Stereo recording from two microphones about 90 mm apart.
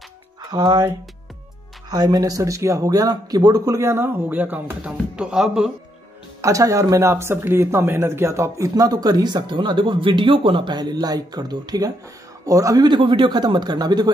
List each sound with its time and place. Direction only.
0.5 s speech: 45° right (ahead or behind)
1.9 s speech: 45° right (ahead or behind)
3.8 s speech: 25° right (ahead or behind); by 5.7 s 10° right (ahead or behind)
6.4 s a man's voice: 40° right (ahead or behind)
12.8 s speech: 65° right (ahead or behind); by 14.1 s 50° right (ahead or behind)